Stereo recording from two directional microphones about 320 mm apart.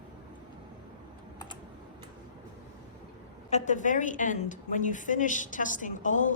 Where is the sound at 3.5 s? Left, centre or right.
Left.